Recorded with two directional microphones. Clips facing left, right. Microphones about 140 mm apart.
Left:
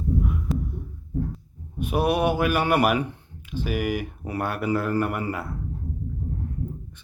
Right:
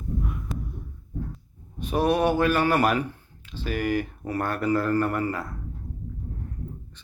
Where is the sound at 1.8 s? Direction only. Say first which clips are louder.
Even; 10° left (ahead or behind).